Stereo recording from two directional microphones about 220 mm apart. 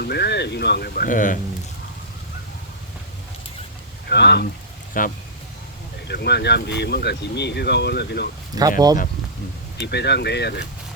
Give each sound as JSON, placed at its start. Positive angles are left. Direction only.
{"t": 0.0, "sound": "speech", "side_deg": 45}
{"t": 4.1, "sound": "speech", "side_deg": 50}
{"t": 4.9, "sound": "speech", "side_deg": 40}
{"t": 6.1, "sound": "speech", "side_deg": 50}
{"t": 8.8, "sound": "speech", "side_deg": -15}
{"t": 9.8, "sound": "speech", "side_deg": 50}